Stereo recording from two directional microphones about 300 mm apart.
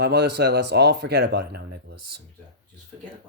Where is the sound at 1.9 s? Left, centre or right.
Right.